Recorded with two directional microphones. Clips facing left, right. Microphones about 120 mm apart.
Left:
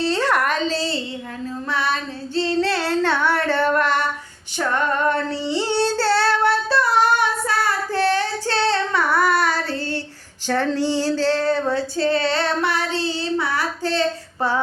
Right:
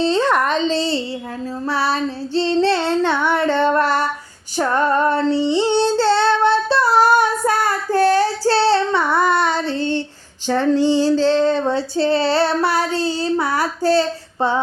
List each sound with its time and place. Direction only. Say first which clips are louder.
0.0 s female singing: right 3 dB; 20° right (ahead or behind)
4.5 s child singing: right 4 dB; 35° right (ahead or behind)
10.4 s female singing: right 5 dB; 15° right (ahead or behind); by 14.0 s 40° right (ahead or behind)